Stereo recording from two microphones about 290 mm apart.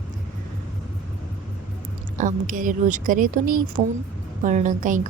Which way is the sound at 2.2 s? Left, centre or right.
Right.